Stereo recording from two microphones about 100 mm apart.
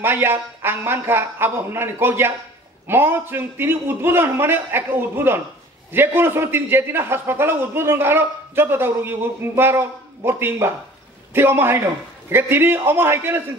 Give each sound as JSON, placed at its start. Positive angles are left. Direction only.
{"t": 0.0, "sound": "a man's voice", "side_deg": -20}